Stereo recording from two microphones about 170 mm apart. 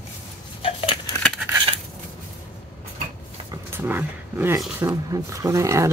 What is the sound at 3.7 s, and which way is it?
Speech, 10° right (ahead or behind).